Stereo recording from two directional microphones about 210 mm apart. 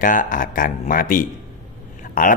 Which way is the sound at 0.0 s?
40° left (ahead or behind).